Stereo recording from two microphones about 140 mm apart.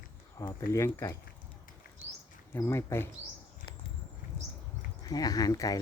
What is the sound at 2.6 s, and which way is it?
Speech, 20° left (ahead or behind).